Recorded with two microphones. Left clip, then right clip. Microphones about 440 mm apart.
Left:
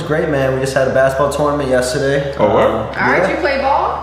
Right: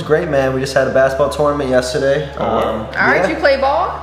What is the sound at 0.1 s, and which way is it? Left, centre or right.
A man's voice, centre.